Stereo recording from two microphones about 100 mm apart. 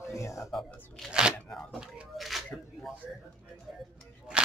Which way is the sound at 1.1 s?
10° right (ahead or behind).